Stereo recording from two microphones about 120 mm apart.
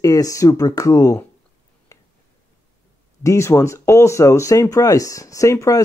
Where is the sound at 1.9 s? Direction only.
25° left (ahead or behind).